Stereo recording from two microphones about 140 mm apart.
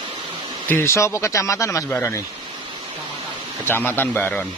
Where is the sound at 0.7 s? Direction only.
15° left (ahead or behind).